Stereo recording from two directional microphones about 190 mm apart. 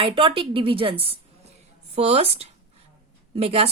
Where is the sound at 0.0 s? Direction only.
30° right (ahead or behind).